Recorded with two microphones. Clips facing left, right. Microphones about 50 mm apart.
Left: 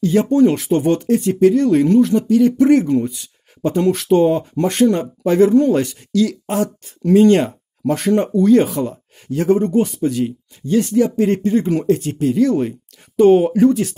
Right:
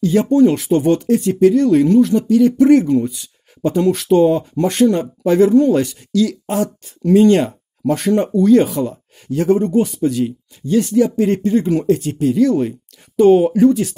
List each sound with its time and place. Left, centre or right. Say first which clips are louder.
0.3 s speech: right 3 dB; left
2.8 s speech: right 1 dB; left